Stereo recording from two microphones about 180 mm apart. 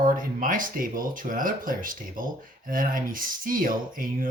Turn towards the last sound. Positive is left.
turn(degrees=-50)  # may be behind; listen again after turning